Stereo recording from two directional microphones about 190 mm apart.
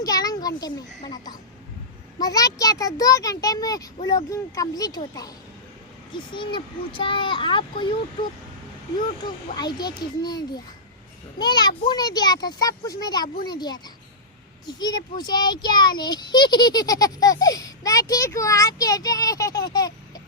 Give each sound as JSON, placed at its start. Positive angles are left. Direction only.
{"t": 0.0, "sound": "a sound", "side_deg": 20}
{"t": 1.0, "sound": "a child's voice", "side_deg": 20}
{"t": 6.3, "sound": "a child's voice", "side_deg": 25}
{"t": 9.6, "sound": "a child's voice", "side_deg": 20}